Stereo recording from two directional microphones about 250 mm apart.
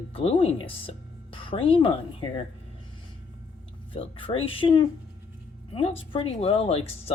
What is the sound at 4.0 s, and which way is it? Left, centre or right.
Speech, left.